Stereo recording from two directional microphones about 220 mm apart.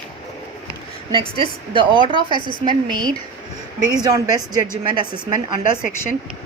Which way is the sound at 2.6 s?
20° right (ahead or behind).